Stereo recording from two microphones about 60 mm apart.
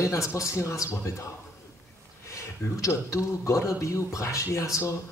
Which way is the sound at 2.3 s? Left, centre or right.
Left.